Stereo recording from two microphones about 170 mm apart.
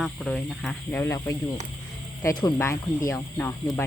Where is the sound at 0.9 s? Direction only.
15° left (ahead or behind).